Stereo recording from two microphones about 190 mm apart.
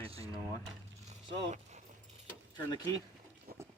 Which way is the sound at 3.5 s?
50° right (ahead or behind).